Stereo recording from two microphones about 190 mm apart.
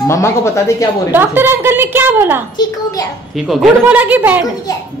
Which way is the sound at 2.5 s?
20° left (ahead or behind).